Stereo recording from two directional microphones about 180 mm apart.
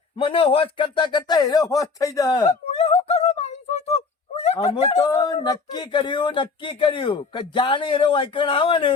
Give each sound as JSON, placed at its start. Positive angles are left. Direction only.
{"t": 0.2, "sound": "speech", "side_deg": 30}
{"t": 2.5, "sound": "a sound", "side_deg": 35}
{"t": 4.9, "sound": "speech", "side_deg": 20}